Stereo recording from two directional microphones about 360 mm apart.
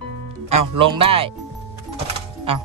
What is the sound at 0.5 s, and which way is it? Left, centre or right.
Speech, centre.